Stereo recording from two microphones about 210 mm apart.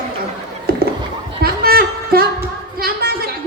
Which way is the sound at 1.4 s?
45° right (ahead or behind).